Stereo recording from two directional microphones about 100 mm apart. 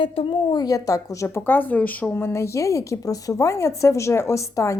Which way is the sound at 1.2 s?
20° left (ahead or behind).